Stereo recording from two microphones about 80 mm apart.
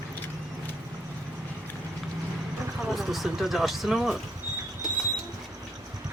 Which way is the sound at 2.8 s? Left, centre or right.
Centre.